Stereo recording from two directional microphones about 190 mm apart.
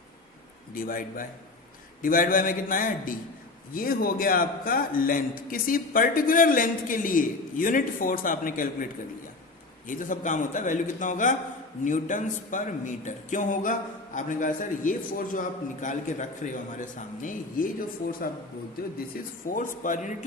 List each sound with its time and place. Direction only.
0.7 s a man's voice: 45° left (ahead or behind)